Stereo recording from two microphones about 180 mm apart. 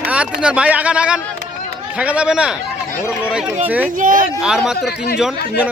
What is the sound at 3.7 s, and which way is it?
Speech, 10° right (ahead or behind).